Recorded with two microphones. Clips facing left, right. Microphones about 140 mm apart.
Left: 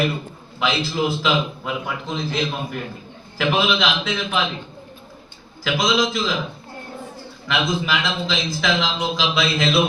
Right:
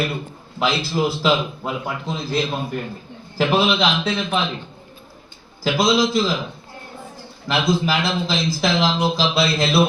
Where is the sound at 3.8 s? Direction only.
35° right (ahead or behind).